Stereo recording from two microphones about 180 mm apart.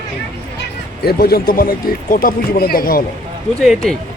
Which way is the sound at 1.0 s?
60° left (ahead or behind).